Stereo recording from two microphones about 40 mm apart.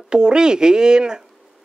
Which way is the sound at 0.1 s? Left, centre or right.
Right.